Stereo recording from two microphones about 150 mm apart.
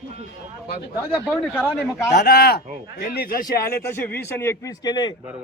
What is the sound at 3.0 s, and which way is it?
Speech, 70° left (ahead or behind).